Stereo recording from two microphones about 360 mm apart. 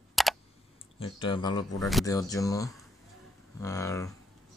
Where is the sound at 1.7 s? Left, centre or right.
Centre.